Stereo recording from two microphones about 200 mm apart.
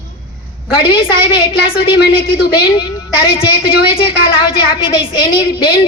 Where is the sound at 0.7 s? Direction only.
25° left (ahead or behind).